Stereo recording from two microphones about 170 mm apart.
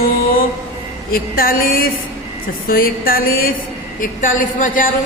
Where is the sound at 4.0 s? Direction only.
50° left (ahead or behind).